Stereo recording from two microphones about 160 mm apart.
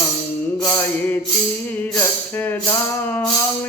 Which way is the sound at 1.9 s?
15° left (ahead or behind).